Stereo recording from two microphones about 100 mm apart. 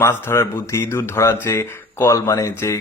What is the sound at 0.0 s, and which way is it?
Speech, 25° left (ahead or behind).